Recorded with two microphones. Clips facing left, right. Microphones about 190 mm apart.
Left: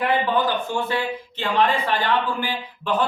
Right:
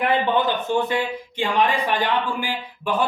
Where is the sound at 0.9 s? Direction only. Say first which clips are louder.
Right 1 dB; 15° right (ahead or behind).